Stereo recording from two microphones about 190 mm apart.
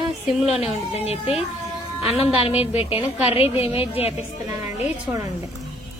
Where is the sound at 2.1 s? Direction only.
30° left (ahead or behind).